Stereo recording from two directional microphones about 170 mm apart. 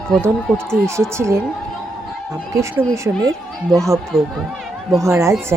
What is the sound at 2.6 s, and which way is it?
Speech, 15° right (ahead or behind).